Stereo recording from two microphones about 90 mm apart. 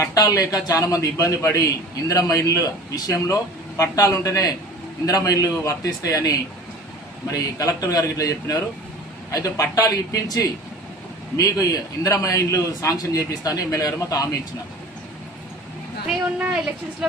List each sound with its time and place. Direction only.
0.0 s a man's voice: 40° left (ahead or behind)